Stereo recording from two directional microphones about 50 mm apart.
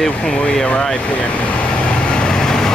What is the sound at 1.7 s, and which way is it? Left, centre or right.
Vehicle, centre.